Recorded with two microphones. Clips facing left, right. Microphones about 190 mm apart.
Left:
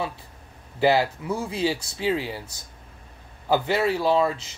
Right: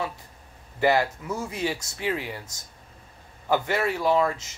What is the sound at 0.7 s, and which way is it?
Speech, 30° left (ahead or behind).